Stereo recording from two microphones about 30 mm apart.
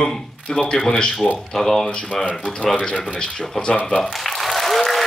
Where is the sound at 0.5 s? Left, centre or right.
Left.